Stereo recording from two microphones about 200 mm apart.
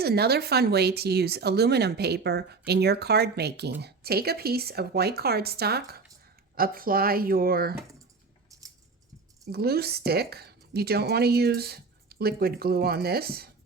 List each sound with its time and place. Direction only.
0.0 s speech: 55° right (ahead or behind)
9.5 s speech: 50° right (ahead or behind)